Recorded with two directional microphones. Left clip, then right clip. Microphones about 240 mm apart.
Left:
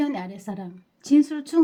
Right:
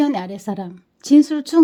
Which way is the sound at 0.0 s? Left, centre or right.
Right.